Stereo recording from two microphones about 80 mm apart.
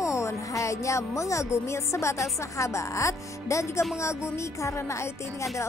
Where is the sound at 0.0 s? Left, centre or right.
Left.